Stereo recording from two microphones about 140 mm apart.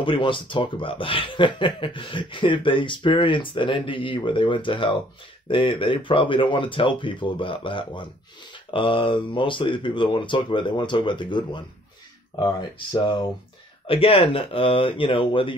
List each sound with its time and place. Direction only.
0.0 s speech: 35° left (ahead or behind)
13.8 s speech: 40° left (ahead or behind)